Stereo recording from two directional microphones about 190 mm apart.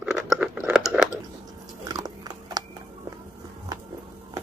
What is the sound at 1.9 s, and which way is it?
Biting, 20° right (ahead or behind).